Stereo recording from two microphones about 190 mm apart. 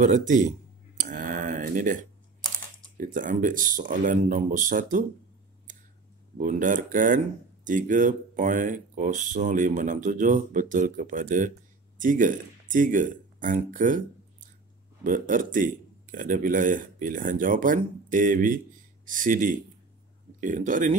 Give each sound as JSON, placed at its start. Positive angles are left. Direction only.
{"t": 0.0, "sound": "speech", "side_deg": -40}
{"t": 0.9, "sound": "a sound", "side_deg": -45}
{"t": 3.0, "sound": "speech", "side_deg": -45}
{"t": 6.3, "sound": "speech", "side_deg": -45}